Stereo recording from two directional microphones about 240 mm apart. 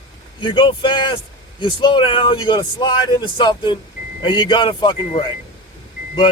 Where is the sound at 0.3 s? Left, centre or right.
Centre.